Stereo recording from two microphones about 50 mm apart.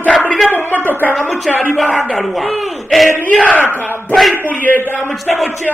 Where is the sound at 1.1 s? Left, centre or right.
Left.